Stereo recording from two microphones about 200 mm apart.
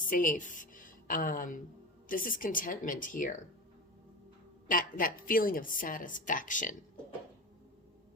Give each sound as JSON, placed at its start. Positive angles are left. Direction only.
{"t": 0.1, "sound": "a woman's voice", "side_deg": 40}
{"t": 4.7, "sound": "a woman's voice", "side_deg": 45}